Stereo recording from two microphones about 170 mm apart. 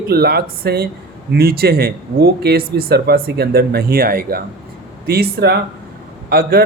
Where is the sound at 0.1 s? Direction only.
65° right (ahead or behind).